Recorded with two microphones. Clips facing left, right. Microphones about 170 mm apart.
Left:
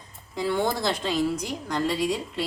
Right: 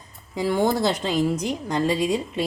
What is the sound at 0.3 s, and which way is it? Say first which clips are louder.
A woman's voice: right 4 dB; 15° right (ahead or behind).